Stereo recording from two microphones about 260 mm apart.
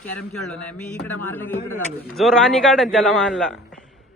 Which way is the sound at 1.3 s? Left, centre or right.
Centre.